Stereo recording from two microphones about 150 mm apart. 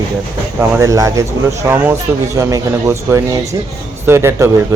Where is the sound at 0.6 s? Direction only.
20° right (ahead or behind).